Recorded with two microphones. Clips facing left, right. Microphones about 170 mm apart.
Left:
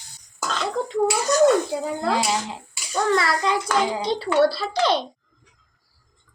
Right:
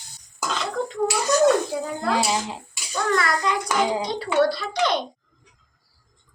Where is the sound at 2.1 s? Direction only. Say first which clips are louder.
Even; 15° right (ahead or behind).